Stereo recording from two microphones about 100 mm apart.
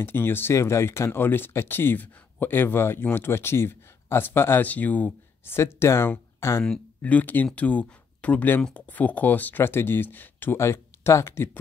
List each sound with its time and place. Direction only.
0.0 s speech: 20° left (ahead or behind)
6.6 s speech: 10° left (ahead or behind)